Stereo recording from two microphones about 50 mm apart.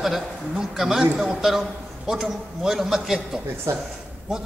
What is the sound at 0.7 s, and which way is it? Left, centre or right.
Speech, centre.